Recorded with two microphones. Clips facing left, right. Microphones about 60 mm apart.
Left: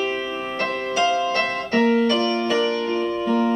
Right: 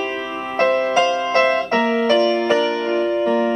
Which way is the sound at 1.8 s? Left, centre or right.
Centre.